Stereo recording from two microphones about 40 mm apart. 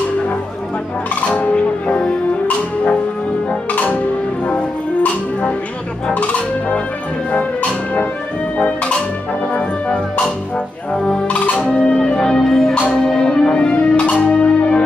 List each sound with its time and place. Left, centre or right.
1.5 s music: left
8.5 s music: left
11.2 s music: left
11.6 s music: left
14.3 s music: left